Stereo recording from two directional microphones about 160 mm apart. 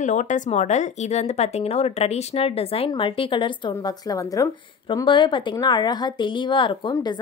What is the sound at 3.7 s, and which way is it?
A woman's voice, 20° left (ahead or behind).